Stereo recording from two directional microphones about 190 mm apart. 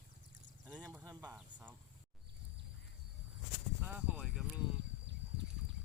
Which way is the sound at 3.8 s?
5° right (ahead or behind).